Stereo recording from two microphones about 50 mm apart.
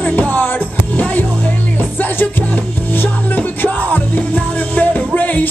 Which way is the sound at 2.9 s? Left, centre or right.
Left.